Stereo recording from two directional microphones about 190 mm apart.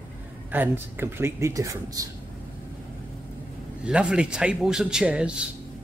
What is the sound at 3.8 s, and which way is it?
Speech, 5° right (ahead or behind).